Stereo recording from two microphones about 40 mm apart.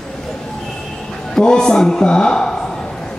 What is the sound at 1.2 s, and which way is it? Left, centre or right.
A man's voice, centre.